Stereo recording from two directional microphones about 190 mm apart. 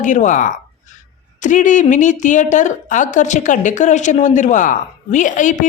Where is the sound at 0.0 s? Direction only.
40° left (ahead or behind).